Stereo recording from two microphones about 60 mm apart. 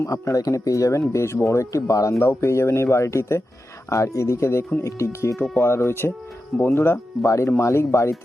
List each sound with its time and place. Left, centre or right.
0.0 s speech: left
2.1 s speech: left
5.4 s speech: left
7.3 s speech: left